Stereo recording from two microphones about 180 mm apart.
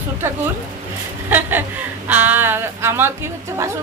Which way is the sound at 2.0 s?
10° right (ahead or behind).